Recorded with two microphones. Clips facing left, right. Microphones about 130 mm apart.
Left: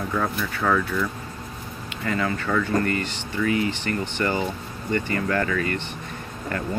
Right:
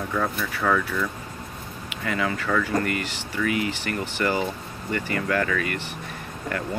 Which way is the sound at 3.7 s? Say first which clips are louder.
Left 2 dB; 5° right (ahead or behind).